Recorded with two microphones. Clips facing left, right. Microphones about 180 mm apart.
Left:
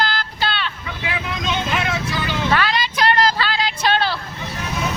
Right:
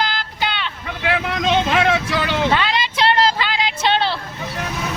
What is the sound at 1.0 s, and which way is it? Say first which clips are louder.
Vehicle: right 6 dB; 70° right (ahead or behind).